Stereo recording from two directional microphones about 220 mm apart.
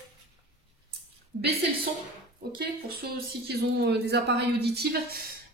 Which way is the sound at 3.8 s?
50° right (ahead or behind).